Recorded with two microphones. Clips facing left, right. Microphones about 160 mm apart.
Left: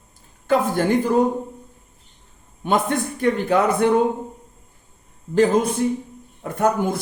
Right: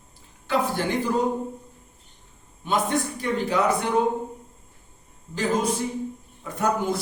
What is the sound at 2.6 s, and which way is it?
A man's voice, 55° left (ahead or behind).